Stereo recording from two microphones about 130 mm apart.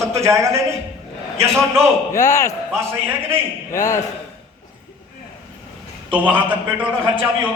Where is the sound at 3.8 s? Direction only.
25° left (ahead or behind).